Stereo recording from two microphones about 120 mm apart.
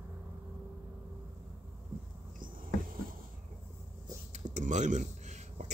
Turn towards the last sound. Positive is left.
turn(degrees=-80)